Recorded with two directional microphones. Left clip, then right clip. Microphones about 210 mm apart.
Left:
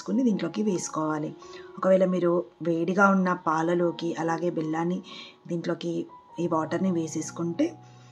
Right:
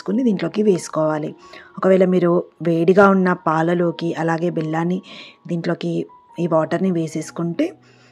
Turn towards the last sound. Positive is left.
turn(degrees=-30)  # may be behind; listen again after turning